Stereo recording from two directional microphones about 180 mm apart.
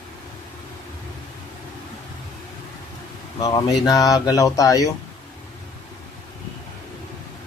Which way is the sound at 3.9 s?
20° left (ahead or behind).